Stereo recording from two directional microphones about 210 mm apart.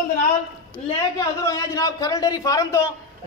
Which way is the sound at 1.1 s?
15° left (ahead or behind).